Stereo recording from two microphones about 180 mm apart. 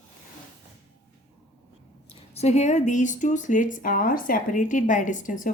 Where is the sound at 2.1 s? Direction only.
35° left (ahead or behind).